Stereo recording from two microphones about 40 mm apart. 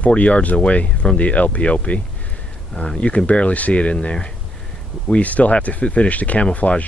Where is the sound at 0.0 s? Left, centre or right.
Left.